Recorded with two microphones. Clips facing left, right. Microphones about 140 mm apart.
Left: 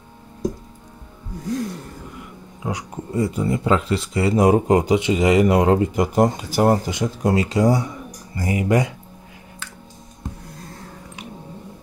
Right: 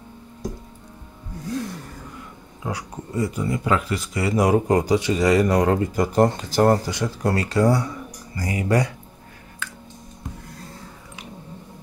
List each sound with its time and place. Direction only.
2.6 s speech: 20° left (ahead or behind)